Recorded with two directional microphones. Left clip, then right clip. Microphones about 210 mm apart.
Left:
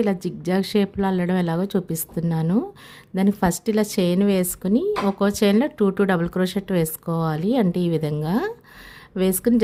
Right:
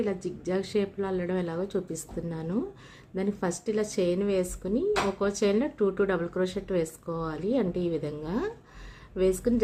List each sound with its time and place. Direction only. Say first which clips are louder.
0.0 s speech: left 7 dB; 50° left (ahead or behind)